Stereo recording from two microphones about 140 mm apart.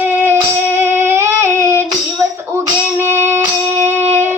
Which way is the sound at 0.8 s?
15° right (ahead or behind).